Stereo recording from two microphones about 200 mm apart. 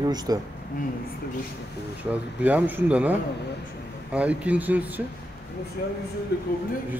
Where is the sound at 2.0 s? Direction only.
10° right (ahead or behind).